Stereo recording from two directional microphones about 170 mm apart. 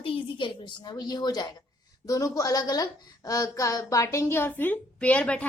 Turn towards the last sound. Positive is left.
turn(degrees=5)  # may be behind; listen again after turning